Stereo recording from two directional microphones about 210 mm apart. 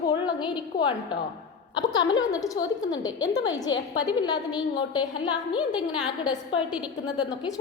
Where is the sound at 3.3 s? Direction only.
60° left (ahead or behind).